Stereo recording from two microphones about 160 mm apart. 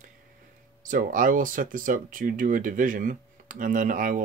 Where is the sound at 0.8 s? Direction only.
55° right (ahead or behind).